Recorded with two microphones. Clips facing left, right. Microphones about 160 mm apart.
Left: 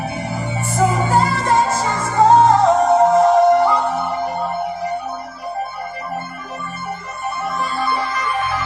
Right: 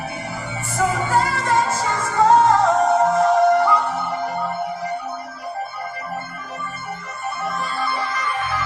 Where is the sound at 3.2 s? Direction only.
25° left (ahead or behind).